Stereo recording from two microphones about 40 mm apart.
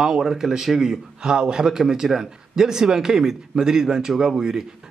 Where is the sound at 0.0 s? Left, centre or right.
Centre.